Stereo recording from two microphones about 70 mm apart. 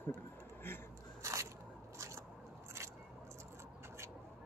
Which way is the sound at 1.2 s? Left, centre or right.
Right.